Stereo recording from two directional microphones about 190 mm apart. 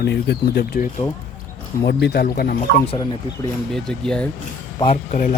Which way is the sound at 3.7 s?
5° left (ahead or behind).